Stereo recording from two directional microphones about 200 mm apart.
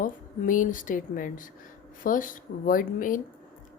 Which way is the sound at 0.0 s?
40° left (ahead or behind).